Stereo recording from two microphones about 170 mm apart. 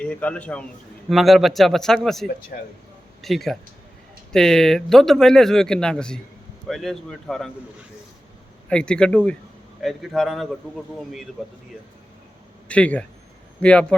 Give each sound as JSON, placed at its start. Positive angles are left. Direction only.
{"t": 0.0, "sound": "a man's voice", "side_deg": 10}
{"t": 2.5, "sound": "speech", "side_deg": 55}
{"t": 3.2, "sound": "speech", "side_deg": 0}
{"t": 8.7, "sound": "speech", "side_deg": 5}
{"t": 12.6, "sound": "speech", "side_deg": 5}